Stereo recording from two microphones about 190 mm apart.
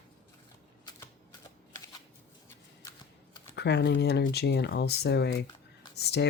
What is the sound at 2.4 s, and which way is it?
Shuffling cards, 20° left (ahead or behind).